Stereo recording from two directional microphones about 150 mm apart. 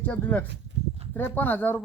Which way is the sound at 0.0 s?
10° left (ahead or behind).